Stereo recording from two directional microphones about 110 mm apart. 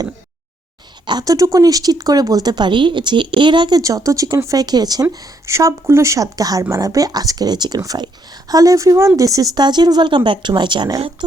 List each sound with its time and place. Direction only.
1.0 s speech: 35° right (ahead or behind)
5.0 s speech: 25° right (ahead or behind); by 11.3 s 45° right (ahead or behind)